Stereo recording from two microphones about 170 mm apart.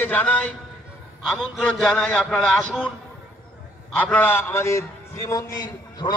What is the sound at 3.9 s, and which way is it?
A man's voice, 10° left (ahead or behind).